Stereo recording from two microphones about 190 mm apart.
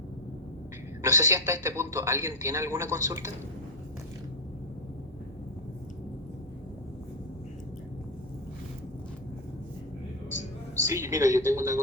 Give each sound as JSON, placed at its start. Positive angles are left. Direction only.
{"t": 1.0, "sound": "a man's voice", "side_deg": -15}
{"t": 10.8, "sound": "a woman's voice", "side_deg": -15}